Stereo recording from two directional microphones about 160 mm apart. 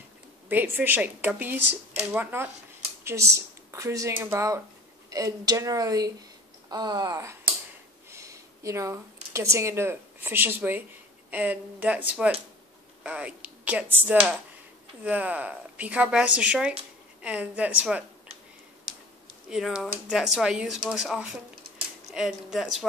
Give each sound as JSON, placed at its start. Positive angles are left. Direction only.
{"t": 0.5, "sound": "a woman's voice", "side_deg": -10}
{"t": 19.5, "sound": "speech", "side_deg": 0}